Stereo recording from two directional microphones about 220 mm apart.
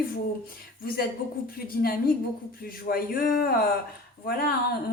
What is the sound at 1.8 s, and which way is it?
Speech, 40° left (ahead or behind).